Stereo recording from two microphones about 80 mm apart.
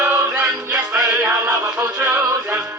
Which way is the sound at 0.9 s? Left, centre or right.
Centre.